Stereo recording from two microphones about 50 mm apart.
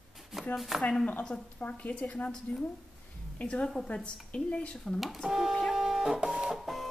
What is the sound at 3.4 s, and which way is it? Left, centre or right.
A woman's voice, left.